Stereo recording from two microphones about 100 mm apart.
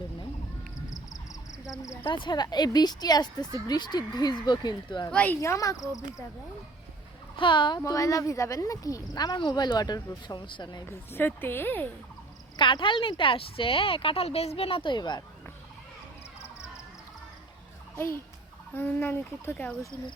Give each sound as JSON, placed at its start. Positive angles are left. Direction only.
{"t": 0.9, "sound": "frog", "side_deg": 35}
{"t": 1.7, "sound": "cricket", "side_deg": 30}
{"t": 2.0, "sound": "speech", "side_deg": 55}
{"t": 5.1, "sound": "speech", "side_deg": 15}
{"t": 5.4, "sound": "speech", "side_deg": 30}
{"t": 7.3, "sound": "speech", "side_deg": 50}
{"t": 7.9, "sound": "speech", "side_deg": 35}
{"t": 11.1, "sound": "speech", "side_deg": 20}
{"t": 12.5, "sound": "speech", "side_deg": 55}
{"t": 14.9, "sound": "speech", "side_deg": 45}
{"t": 17.9, "sound": "turkey", "side_deg": 25}
{"t": 18.7, "sound": "speech", "side_deg": 20}